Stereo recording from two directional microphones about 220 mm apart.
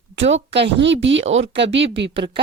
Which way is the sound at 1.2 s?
30° right (ahead or behind).